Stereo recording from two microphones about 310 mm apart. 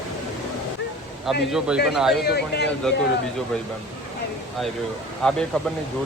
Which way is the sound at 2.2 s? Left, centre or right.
Left.